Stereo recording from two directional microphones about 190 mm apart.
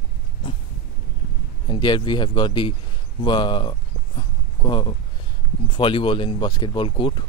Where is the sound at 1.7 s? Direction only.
25° left (ahead or behind).